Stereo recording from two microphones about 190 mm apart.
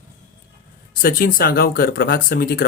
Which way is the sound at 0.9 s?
50° left (ahead or behind).